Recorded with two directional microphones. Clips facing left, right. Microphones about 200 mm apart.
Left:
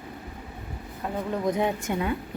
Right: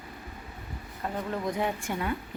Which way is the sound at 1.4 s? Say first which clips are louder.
Left 7 dB; 20° left (ahead or behind).